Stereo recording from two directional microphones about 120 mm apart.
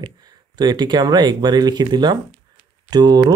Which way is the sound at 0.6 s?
35° right (ahead or behind).